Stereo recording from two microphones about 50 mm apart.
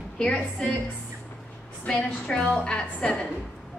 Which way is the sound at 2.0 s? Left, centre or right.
Centre.